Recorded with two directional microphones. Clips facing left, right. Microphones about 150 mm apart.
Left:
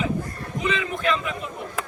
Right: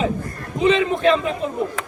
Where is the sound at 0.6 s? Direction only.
30° right (ahead or behind).